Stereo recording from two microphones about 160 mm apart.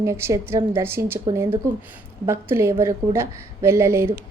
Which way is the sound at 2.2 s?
15° right (ahead or behind).